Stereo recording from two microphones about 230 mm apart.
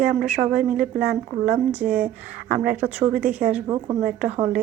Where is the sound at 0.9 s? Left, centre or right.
Right.